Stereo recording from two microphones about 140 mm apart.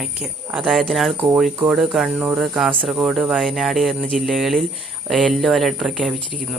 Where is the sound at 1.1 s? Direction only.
15° right (ahead or behind).